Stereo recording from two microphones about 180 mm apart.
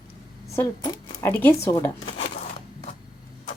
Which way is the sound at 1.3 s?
10° left (ahead or behind).